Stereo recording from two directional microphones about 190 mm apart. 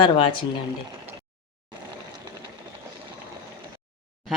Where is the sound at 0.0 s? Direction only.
25° left (ahead or behind).